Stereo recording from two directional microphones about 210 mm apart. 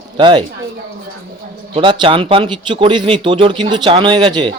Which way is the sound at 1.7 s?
25° right (ahead or behind).